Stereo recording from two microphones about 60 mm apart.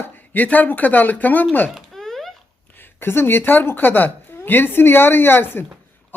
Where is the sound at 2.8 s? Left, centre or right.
Left.